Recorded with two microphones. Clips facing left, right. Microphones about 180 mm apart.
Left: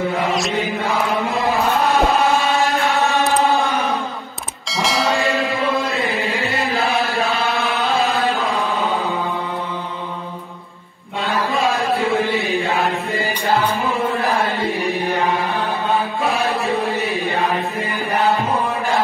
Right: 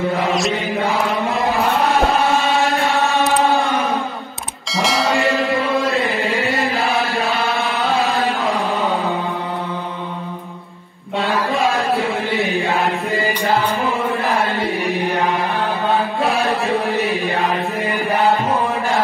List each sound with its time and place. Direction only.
0.3 s mantra: centre (ahead or behind)
2.7 s chant: centre (ahead or behind)
4.6 s music: centre (ahead or behind)